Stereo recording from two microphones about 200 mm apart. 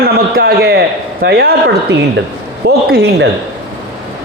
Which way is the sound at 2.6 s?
55° right (ahead or behind).